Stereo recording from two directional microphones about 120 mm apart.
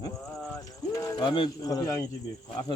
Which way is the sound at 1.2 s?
40° left (ahead or behind).